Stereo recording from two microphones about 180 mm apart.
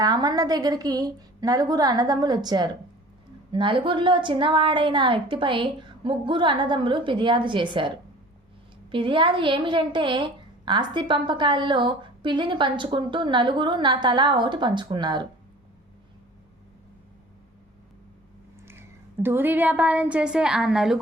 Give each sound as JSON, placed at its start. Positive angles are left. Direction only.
{"t": 0.0, "sound": "a woman's voice", "side_deg": -20}
{"t": 18.6, "sound": "a woman's voice", "side_deg": -15}